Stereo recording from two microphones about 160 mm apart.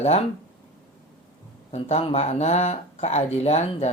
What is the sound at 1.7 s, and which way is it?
Speech, 40° left (ahead or behind).